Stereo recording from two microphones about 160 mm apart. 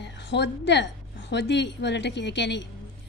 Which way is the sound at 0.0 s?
90° left.